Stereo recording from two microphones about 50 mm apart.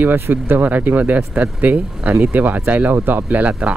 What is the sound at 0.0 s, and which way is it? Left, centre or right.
Speech, right.